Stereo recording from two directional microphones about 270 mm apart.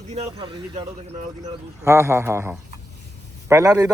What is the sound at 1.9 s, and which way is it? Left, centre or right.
Speech, centre.